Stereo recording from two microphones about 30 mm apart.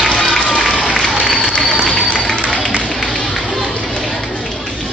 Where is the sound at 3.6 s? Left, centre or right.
Left.